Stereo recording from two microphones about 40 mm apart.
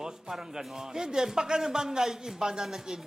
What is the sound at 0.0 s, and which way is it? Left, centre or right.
Speech, centre.